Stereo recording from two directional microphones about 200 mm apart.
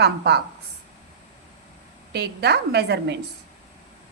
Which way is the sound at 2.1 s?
55° right (ahead or behind).